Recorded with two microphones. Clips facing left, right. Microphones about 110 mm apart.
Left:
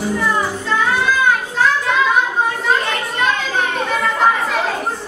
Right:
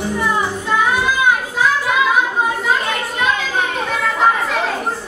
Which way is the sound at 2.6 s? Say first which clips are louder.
Even; centre (ahead or behind).